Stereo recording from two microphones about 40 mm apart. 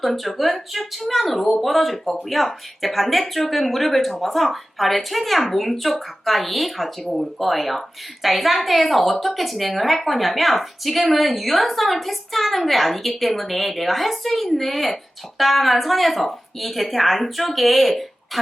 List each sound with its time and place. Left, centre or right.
0.0 s speech: centre